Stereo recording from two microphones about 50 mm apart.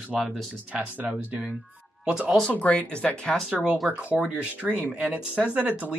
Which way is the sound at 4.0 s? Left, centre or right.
Right.